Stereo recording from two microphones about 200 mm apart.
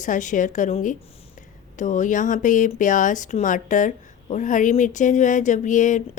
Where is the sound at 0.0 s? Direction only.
40° left (ahead or behind).